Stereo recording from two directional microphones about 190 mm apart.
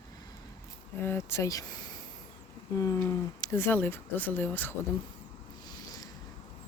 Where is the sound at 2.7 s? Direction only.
20° left (ahead or behind).